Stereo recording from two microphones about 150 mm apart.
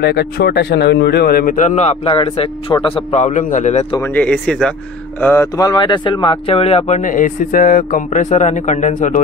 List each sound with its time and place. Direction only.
0.0 s a man's voice: 90° left; by 3.0 s 35° left (ahead or behind)
3.1 s a man's voice: 50° left (ahead or behind)
4.0 s speech: 10° left (ahead or behind)
5.2 s speech: 15° left (ahead or behind); by 7.0 s 40° left (ahead or behind)
7.0 s speech: 60° left (ahead or behind)